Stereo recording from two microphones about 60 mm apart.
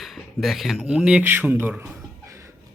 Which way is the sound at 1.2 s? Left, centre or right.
Right.